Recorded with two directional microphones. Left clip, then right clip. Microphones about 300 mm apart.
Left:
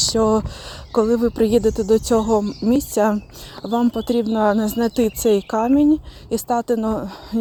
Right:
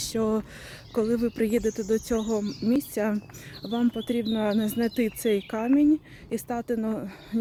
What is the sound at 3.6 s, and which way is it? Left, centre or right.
Speech, centre.